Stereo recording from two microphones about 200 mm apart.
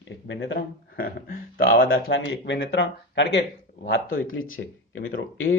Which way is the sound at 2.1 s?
65° left (ahead or behind).